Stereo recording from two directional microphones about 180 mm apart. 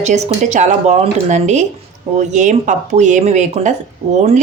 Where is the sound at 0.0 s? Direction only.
40° right (ahead or behind).